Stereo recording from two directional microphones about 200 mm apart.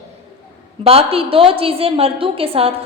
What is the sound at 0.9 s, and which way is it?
A woman's voice, 30° right (ahead or behind).